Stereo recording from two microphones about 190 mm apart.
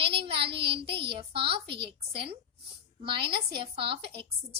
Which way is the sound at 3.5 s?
30° right (ahead or behind).